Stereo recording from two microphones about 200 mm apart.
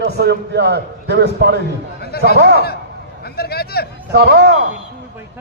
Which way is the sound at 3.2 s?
50° left (ahead or behind).